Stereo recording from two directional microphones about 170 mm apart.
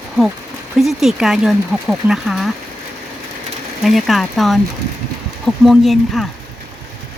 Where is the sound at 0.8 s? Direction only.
Centre (ahead or behind).